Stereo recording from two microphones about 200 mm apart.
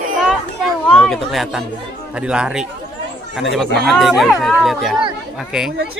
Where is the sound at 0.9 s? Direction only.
5° left (ahead or behind).